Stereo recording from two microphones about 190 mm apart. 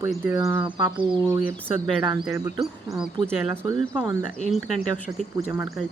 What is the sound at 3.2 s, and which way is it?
Speech, 5° left (ahead or behind).